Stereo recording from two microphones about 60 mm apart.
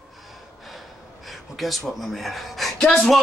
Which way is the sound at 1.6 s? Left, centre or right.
Centre.